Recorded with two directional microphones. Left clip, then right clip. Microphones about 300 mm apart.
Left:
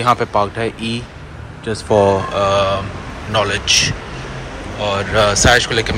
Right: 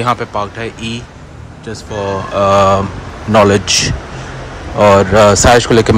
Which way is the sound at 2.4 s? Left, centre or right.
Centre.